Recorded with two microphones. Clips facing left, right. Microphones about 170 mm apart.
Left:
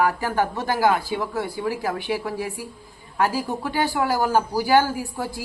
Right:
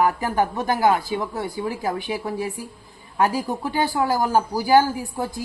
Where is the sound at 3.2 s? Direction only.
20° right (ahead or behind).